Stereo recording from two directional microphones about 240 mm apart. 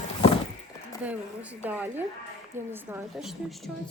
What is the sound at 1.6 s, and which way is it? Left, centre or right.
Speech, centre.